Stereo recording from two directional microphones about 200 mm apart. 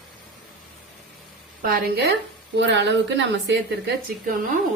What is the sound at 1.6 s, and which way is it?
Speech, 50° right (ahead or behind).